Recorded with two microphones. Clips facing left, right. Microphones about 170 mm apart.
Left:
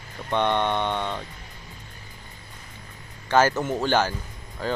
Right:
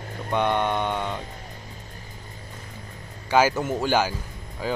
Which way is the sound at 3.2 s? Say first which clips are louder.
Even; 10° right (ahead or behind).